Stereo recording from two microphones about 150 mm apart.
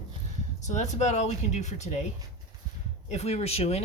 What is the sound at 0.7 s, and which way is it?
Speech, 50° left (ahead or behind).